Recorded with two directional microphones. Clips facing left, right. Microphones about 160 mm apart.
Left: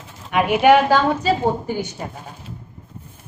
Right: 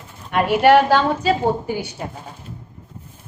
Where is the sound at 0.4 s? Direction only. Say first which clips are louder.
Right 1 dB; 10° left (ahead or behind).